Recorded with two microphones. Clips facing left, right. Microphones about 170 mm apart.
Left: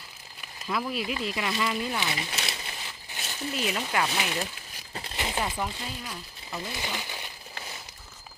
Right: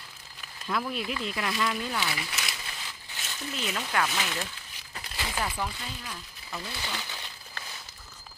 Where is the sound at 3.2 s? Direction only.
35° left (ahead or behind).